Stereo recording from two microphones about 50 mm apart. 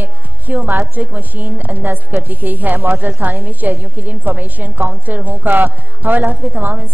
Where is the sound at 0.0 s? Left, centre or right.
Right.